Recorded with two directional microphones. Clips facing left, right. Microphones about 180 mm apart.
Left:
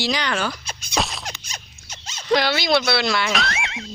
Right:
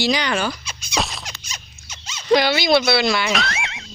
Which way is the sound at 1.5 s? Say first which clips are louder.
Even; 50° left (ahead or behind).